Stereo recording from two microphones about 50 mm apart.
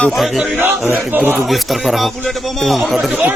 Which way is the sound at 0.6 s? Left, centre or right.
Right.